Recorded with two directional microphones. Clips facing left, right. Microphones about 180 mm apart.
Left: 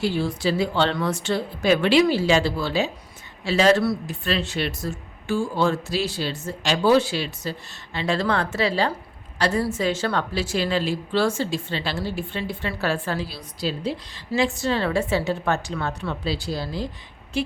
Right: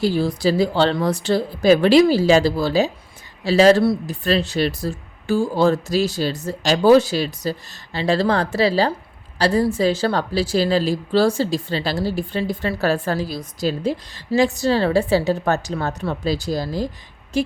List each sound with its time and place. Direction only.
0.0 s speech: 40° right (ahead or behind)